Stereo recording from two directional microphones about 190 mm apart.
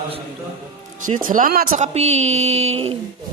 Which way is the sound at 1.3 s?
50° right (ahead or behind).